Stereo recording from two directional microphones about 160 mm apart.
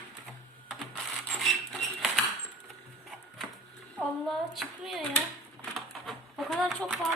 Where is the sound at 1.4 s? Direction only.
Centre (ahead or behind).